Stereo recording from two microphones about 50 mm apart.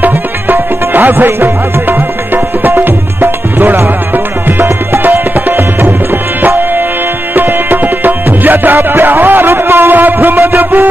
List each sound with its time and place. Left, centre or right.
0.0 s music: right
5.0 s tabla: right
7.3 s music: right